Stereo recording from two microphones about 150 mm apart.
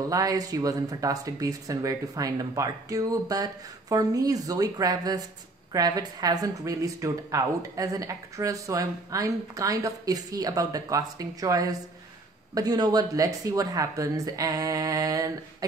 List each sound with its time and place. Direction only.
0.1 s speech: 25° right (ahead or behind)